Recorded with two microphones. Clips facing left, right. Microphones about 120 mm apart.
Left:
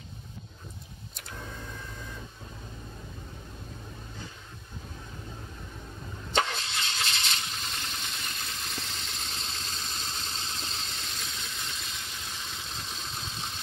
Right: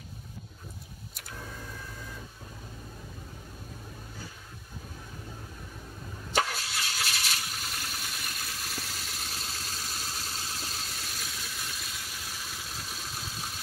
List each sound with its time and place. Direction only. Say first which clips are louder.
6.5 s vehicle: left 1 dB; 5° right (ahead or behind)